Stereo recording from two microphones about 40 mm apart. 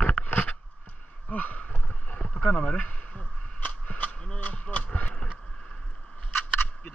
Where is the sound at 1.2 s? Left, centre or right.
Left.